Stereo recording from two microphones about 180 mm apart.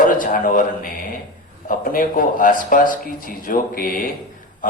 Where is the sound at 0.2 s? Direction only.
50° left (ahead or behind).